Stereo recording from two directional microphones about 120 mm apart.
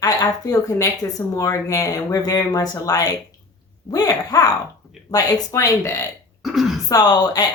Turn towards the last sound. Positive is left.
turn(degrees=35)  # may be behind; listen again after turning